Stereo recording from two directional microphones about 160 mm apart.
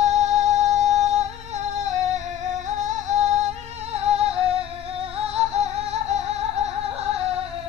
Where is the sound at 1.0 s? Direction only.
45° right (ahead or behind).